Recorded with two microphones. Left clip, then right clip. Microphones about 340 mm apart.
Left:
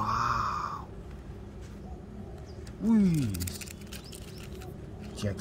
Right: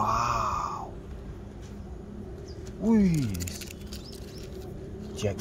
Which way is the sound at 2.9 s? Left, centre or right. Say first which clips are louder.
Right 1 dB; centre.